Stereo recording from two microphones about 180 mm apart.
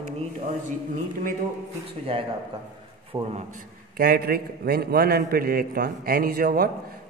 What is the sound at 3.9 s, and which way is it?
A man's voice, 60° right (ahead or behind).